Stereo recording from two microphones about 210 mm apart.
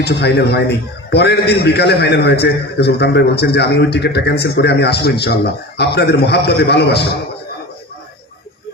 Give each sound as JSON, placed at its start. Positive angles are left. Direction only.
{"t": 0.0, "sound": "a man's voice", "side_deg": 50}